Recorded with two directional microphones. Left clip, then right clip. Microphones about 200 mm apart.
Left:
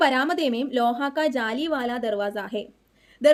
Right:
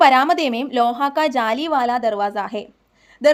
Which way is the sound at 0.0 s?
20° right (ahead or behind).